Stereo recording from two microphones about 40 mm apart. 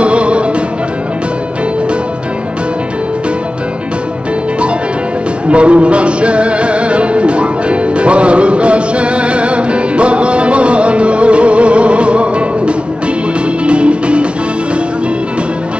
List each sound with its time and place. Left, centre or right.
0.0 s music: right
5.5 s music: right